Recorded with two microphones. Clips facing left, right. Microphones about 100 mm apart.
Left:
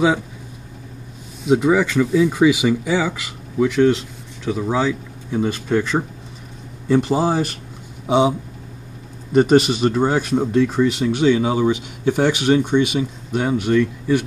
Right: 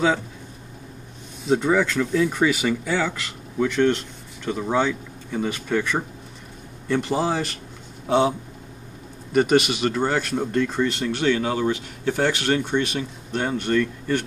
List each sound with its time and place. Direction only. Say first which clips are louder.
1.5 s speech: left 4 dB; 5° left (ahead or behind)
9.3 s a man's voice: left 5 dB; 25° left (ahead or behind)
9.8 s speech: left 5 dB; 10° left (ahead or behind)